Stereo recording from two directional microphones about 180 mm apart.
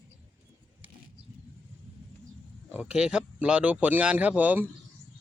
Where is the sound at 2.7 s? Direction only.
5° right (ahead or behind).